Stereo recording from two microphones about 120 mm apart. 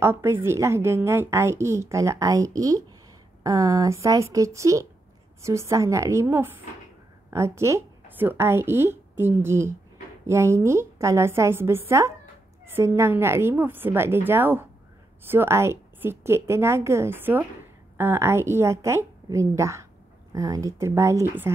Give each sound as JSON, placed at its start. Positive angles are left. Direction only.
{"t": 0.0, "sound": "a woman's voice", "side_deg": -20}